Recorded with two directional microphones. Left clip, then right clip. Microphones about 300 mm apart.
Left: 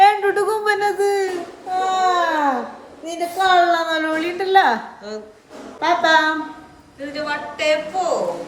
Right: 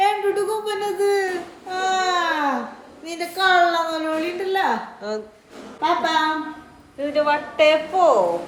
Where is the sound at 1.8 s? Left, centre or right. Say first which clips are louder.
Left 3 dB; centre.